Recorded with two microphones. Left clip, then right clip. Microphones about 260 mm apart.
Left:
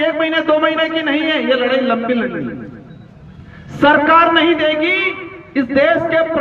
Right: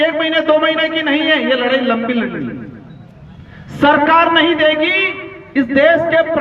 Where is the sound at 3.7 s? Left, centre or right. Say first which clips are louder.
Even; right.